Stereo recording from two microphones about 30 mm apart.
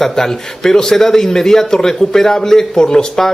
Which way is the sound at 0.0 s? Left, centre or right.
Centre.